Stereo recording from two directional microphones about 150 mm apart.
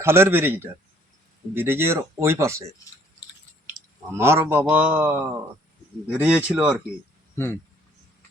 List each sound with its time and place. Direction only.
0.0 s a man's voice: 15° right (ahead or behind)
4.1 s a man's voice: 15° right (ahead or behind)
7.3 s speech: 15° left (ahead or behind)